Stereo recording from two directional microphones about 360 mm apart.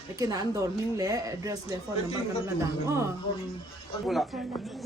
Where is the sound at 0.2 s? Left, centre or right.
Centre.